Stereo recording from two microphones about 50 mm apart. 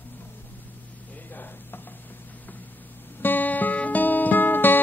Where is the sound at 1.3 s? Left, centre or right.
Left.